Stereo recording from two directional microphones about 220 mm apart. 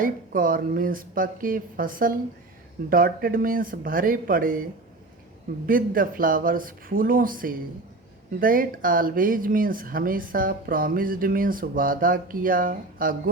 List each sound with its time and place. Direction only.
0.0 s speech: 40° right (ahead or behind)
5.6 s speech: 40° right (ahead or behind)